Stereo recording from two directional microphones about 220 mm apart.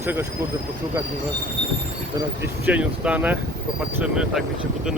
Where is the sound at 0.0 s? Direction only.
10° right (ahead or behind).